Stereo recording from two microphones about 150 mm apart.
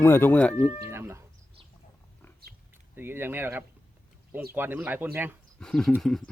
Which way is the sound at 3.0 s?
15° right (ahead or behind).